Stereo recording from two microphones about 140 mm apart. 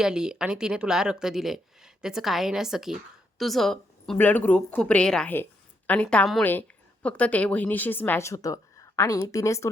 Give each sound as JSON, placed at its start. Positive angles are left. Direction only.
{"t": 0.0, "sound": "a woman's voice", "side_deg": -5}